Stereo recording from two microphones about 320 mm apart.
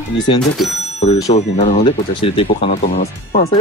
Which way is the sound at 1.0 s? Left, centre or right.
Centre.